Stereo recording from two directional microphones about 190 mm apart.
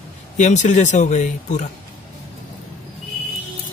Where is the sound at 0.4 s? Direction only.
40° left (ahead or behind).